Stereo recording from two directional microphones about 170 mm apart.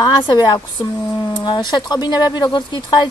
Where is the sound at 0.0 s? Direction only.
25° left (ahead or behind).